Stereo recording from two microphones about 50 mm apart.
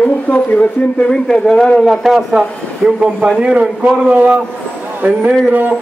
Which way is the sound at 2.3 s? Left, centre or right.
Centre.